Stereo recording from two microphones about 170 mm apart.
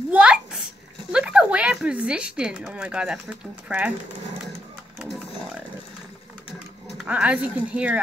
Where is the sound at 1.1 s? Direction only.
5° right (ahead or behind).